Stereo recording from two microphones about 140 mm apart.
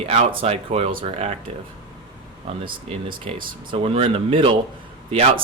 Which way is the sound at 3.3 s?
45° right (ahead or behind).